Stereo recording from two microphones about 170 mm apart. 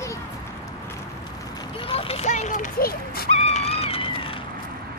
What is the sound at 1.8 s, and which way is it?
Dog, 35° left (ahead or behind).